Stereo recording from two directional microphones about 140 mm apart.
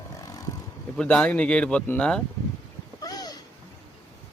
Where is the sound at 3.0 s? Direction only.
25° left (ahead or behind).